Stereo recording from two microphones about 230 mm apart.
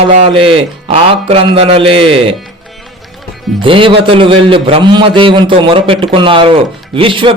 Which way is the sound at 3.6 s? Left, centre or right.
Right.